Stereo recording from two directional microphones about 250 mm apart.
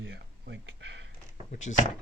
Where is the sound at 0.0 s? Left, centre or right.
Right.